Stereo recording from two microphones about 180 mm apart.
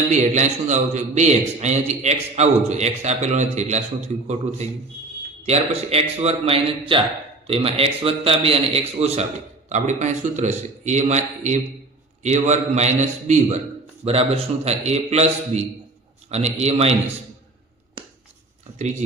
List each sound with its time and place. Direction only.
0.1 s a man's voice: 40° right (ahead or behind)